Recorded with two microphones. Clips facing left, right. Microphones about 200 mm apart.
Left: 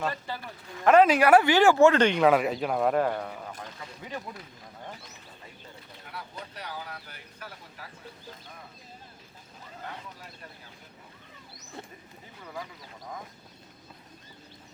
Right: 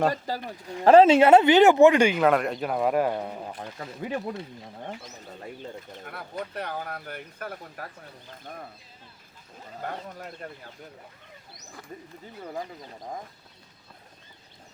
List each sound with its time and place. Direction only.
0.0 s speech: 40° right (ahead or behind)
0.8 s speech: 30° right (ahead or behind); by 3.0 s centre (ahead or behind)
3.0 s speech: 15° right (ahead or behind)
6.4 s speech: 55° right (ahead or behind)
9.8 s speech: 50° right (ahead or behind)
12.4 s speech: 35° right (ahead or behind)